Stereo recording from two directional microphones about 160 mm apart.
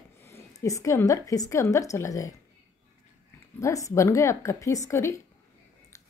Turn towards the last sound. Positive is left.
turn(degrees=20)  # may be behind; listen again after turning